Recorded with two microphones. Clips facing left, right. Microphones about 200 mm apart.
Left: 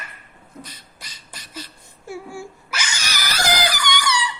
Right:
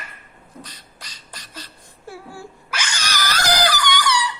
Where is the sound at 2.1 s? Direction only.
10° left (ahead or behind).